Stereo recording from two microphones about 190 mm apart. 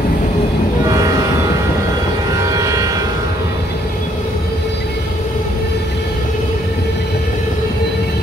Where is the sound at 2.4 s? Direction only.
15° right (ahead or behind).